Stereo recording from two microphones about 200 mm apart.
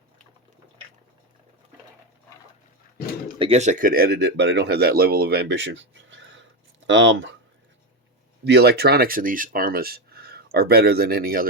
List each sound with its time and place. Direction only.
3.3 s speech: 30° right (ahead or behind); by 7.3 s 65° right (ahead or behind)
8.4 s speech: 55° right (ahead or behind)